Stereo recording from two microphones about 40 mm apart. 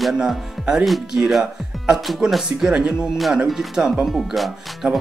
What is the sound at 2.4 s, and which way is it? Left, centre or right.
Speech, centre.